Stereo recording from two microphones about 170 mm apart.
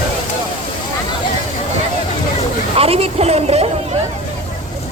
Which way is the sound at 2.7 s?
35° right (ahead or behind).